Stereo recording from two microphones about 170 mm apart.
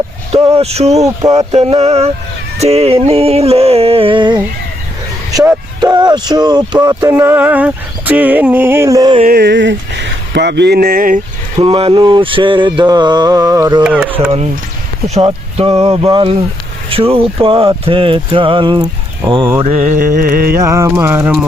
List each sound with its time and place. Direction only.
0.5 s speech: 35° right (ahead or behind)
1.0 s mantra: 20° right (ahead or behind)
1.4 s speech: 40° right (ahead or behind)
2.6 s music: 40° right (ahead or behind)
5.8 s a sound: 25° right (ahead or behind)
6.8 s speech: 15° right (ahead or behind)
9.2 s speech: 70° right (ahead or behind); by 11.2 s 55° right (ahead or behind)
11.6 s mantra: 30° right (ahead or behind)
13.8 s speech: 5° right (ahead or behind)
15.1 s speech: 35° right (ahead or behind)
16.0 s mantra: 30° right (ahead or behind)
16.9 s speech: 35° right (ahead or behind)
19.6 s music: 45° right (ahead or behind); by 20.6 s 60° right (ahead or behind)
20.6 s speech: 15° right (ahead or behind)